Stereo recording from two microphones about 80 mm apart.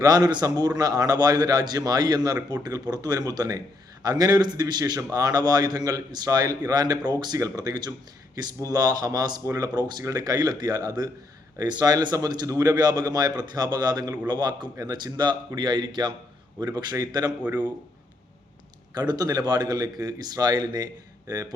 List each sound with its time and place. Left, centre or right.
0.0 s a man's voice: right
10.0 s a man's voice: right
16.7 s a man's voice: right
18.9 s a man's voice: right